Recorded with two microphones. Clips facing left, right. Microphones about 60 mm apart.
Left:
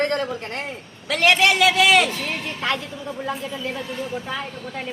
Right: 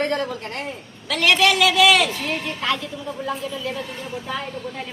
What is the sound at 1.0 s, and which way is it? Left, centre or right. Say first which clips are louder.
A woman's voice: left 1 dB; left.